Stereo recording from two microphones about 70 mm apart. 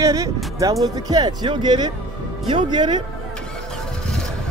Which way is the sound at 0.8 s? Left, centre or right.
Right.